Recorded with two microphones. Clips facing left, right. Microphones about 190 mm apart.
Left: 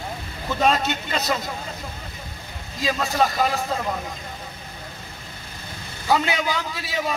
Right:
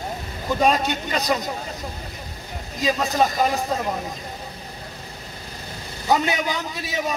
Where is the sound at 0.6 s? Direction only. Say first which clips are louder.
Right 1 dB; 15° right (ahead or behind).